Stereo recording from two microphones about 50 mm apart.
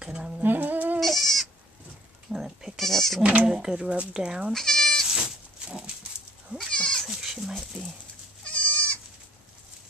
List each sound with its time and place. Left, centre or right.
0.0 s speech: centre
0.4 s humming: right
0.9 s goat: centre
2.3 s goat: centre
2.8 s goat: centre
3.2 s speech: right
3.4 s speech: centre
4.5 s speech: centre
5.1 s goat: centre
6.7 s goat: centre
7.1 s goat: centre
8.5 s goat: left